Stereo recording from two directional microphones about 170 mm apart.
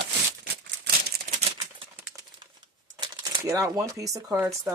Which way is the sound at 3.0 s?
20° right (ahead or behind).